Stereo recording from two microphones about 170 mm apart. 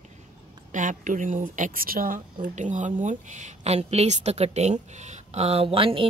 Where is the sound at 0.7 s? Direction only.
50° right (ahead or behind); by 6.0 s 30° right (ahead or behind).